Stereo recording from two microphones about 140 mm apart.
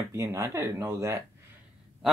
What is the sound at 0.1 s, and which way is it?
Speech, 20° right (ahead or behind).